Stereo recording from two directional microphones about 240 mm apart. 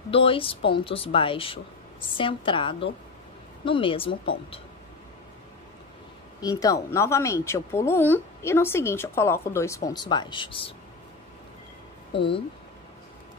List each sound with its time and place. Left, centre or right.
0.1 s a woman's voice: left
6.4 s speech: centre
12.1 s a woman's voice: left